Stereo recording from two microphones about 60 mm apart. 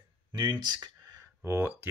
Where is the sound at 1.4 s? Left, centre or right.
Right.